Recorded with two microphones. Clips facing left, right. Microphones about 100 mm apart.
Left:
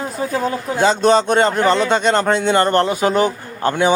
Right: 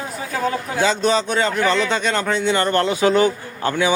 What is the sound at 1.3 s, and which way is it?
Speech, 35° left (ahead or behind).